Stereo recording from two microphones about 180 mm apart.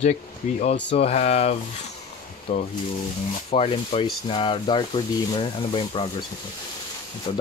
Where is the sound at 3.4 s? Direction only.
35° left (ahead or behind).